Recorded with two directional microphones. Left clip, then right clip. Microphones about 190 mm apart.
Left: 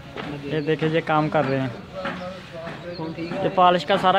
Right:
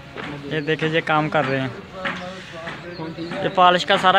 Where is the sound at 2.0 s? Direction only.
45° left (ahead or behind).